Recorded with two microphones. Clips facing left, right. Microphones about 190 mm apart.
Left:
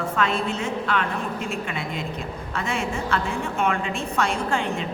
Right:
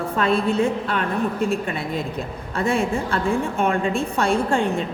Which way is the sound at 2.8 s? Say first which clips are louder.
Right 3 dB; 35° right (ahead or behind).